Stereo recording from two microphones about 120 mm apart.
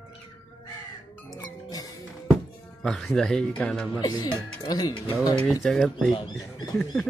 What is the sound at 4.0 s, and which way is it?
Speech, 35° left (ahead or behind).